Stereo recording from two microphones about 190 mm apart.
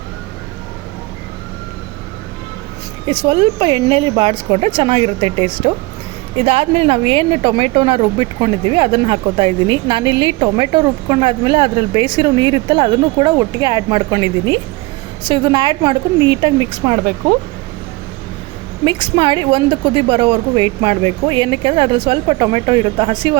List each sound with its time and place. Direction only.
3.2 s a woman's voice: 25° right (ahead or behind)
18.9 s a woman's voice: 25° right (ahead or behind)